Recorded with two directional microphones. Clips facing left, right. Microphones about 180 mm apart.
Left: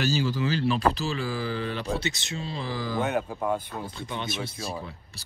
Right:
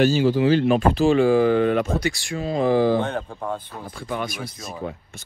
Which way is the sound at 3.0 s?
10° left (ahead or behind).